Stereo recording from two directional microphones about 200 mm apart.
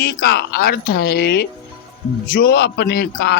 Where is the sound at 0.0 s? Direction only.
55° left (ahead or behind).